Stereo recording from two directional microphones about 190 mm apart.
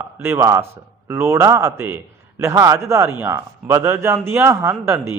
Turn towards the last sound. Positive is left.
turn(degrees=-15)  # may be behind; listen again after turning